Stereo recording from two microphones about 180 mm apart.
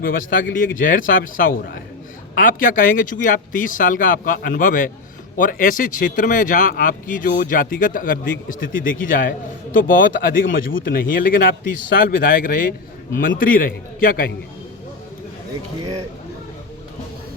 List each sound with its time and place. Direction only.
0.0 s speech: 50° left (ahead or behind)